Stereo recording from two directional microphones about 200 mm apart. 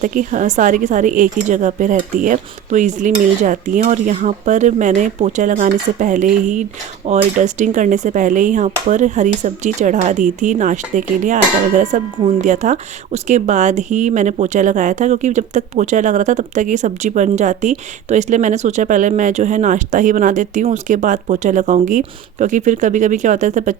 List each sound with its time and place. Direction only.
0.0 s speech: 40° right (ahead or behind)